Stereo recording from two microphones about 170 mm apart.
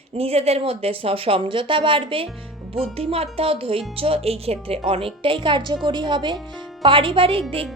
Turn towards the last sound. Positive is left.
turn(degrees=-30)  # may be behind; listen again after turning